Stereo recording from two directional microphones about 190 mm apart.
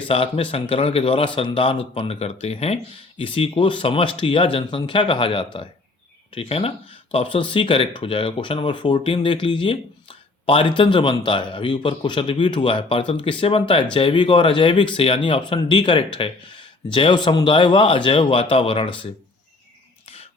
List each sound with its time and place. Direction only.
0.1 s speech: 30° left (ahead or behind)